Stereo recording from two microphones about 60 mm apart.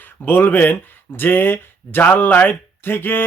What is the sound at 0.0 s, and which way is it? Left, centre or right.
Speech, left.